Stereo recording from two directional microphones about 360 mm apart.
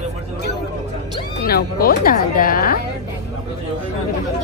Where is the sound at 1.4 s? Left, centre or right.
Left.